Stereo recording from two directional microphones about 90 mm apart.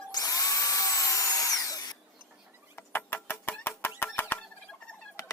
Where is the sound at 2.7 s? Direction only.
25° left (ahead or behind).